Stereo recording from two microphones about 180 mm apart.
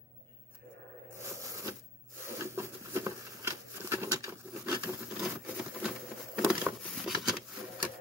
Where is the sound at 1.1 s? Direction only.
15° right (ahead or behind).